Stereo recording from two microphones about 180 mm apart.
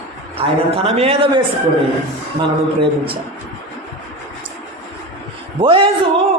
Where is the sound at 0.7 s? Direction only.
35° right (ahead or behind).